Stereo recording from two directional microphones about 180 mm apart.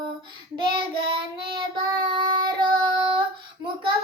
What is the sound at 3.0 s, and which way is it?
Female singing, 25° right (ahead or behind).